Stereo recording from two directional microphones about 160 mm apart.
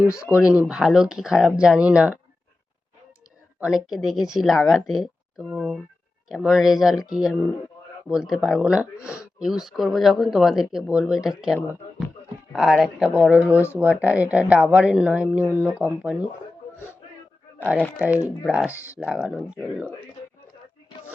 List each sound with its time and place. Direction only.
0.1 s speech: 20° left (ahead or behind)
0.3 s speech: 5° right (ahead or behind)
3.6 s speech: 5° right (ahead or behind)
12.5 s speech: 5° right (ahead or behind)
17.9 s speech: 10° right (ahead or behind)